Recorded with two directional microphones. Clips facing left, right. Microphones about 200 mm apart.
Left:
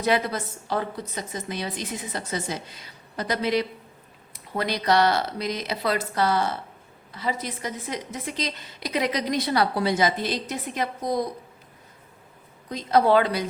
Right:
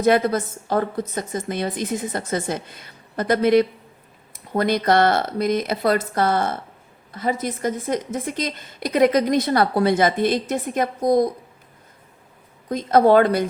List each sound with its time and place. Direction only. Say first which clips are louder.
0.0 s a woman's voice: right 6 dB; 45° right (ahead or behind)
12.6 s a woman's voice: right 5 dB; 50° right (ahead or behind)